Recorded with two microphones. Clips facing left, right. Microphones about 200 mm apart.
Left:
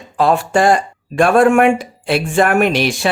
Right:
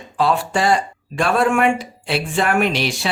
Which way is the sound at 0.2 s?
50° left (ahead or behind).